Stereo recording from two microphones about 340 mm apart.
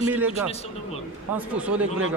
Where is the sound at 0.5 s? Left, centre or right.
Centre.